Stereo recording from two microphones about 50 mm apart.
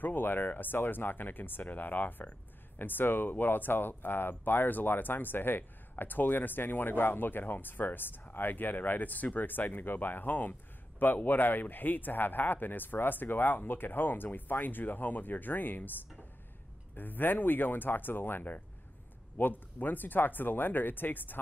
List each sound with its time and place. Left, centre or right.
0.0 s speech: left
16.9 s speech: left